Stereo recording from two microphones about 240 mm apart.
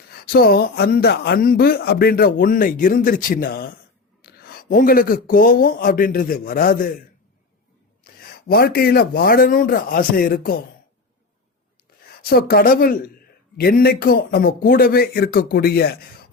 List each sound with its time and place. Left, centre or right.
0.1 s speech: left
8.0 s speech: left
12.3 s speech: left